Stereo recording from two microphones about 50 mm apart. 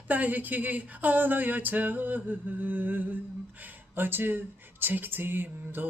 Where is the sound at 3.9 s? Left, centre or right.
Right.